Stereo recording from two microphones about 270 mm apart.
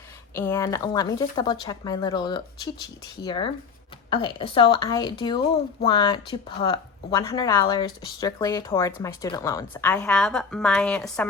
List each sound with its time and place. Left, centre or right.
0.3 s speech: centre